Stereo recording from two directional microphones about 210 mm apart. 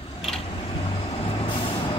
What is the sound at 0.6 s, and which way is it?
Vehicle, 25° left (ahead or behind).